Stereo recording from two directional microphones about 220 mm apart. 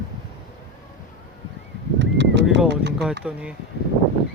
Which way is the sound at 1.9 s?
55° right (ahead or behind).